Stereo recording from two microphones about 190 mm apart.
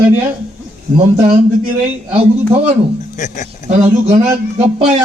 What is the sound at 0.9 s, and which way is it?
Speech, 35° right (ahead or behind).